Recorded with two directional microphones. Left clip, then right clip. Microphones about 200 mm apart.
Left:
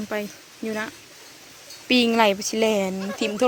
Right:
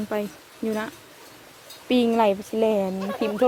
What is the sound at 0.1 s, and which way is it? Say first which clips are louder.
Speech: even; 5° right (ahead or behind).